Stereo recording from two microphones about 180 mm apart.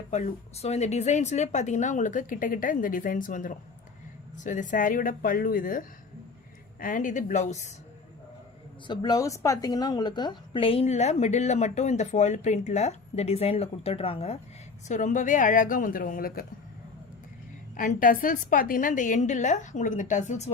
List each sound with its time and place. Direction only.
0.1 s a woman's voice: 40° left (ahead or behind)
8.9 s a woman's voice: 20° left (ahead or behind)
14.8 s a woman's voice: 45° left (ahead or behind)
17.7 s a woman's voice: 50° left (ahead or behind)